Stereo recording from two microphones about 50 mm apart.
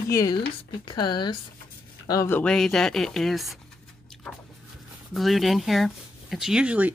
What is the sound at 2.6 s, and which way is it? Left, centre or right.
Speech, centre.